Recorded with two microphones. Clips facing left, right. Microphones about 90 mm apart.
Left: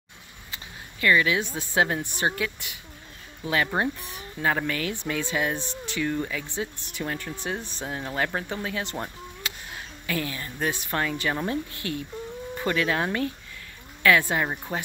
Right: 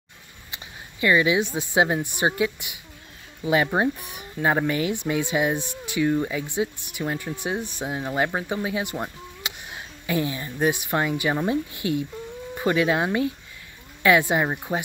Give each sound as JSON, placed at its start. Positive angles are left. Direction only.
{"t": 1.0, "sound": "speech", "side_deg": -15}